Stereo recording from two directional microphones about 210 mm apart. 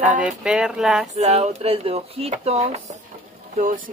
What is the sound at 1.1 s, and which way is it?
Speech, 30° right (ahead or behind).